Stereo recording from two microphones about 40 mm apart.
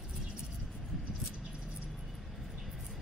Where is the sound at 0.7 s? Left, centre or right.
Centre.